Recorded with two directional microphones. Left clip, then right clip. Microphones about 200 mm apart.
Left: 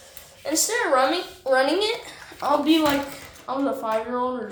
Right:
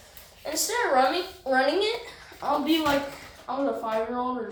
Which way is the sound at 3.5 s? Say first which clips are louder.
Left 3 dB; 55° left (ahead or behind).